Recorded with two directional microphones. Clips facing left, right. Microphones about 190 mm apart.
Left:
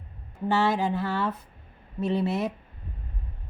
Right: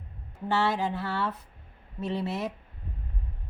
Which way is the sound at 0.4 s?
10° left (ahead or behind).